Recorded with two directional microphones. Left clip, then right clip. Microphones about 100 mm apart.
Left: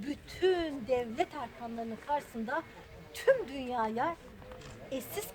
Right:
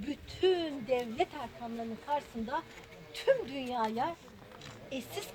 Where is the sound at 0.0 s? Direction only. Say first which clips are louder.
Even; 40° left (ahead or behind).